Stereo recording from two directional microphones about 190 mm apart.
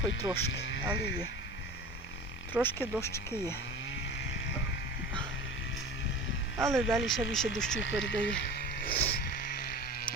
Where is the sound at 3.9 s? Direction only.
75° left (ahead or behind).